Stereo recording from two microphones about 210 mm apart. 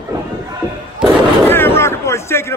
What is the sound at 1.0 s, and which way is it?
Artillery fire, 5° right (ahead or behind).